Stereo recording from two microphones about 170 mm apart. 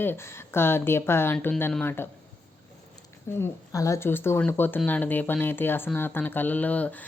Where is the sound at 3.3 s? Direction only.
15° left (ahead or behind).